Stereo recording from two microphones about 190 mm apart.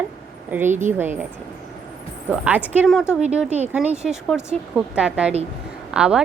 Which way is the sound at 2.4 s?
10° right (ahead or behind).